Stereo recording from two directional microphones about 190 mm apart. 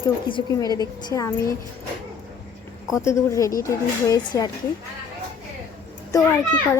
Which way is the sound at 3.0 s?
15° left (ahead or behind).